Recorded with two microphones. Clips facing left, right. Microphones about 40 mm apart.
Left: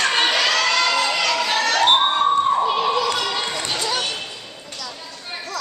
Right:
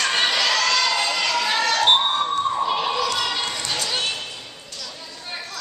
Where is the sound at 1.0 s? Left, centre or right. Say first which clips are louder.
Left 2 dB; left.